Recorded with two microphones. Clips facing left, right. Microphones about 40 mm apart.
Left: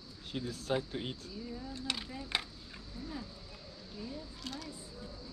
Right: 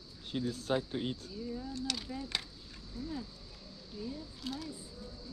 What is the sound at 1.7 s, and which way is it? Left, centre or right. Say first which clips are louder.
Speech: right 1 dB; left.